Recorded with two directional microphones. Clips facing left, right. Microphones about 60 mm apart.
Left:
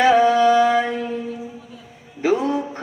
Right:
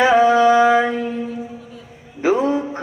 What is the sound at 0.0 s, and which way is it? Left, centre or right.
Music, centre.